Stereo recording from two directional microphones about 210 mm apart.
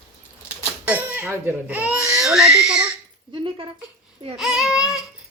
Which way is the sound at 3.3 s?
25° right (ahead or behind).